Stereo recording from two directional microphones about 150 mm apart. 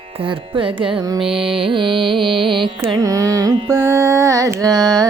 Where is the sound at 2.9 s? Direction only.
25° right (ahead or behind).